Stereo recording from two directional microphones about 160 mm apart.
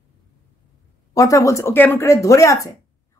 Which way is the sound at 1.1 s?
20° left (ahead or behind).